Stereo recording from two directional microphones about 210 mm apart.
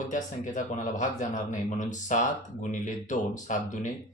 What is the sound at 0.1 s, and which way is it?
A man's voice, 35° left (ahead or behind).